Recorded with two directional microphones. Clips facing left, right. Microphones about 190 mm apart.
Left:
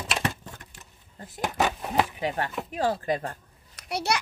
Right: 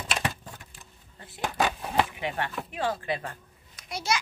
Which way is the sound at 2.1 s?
35° left (ahead or behind).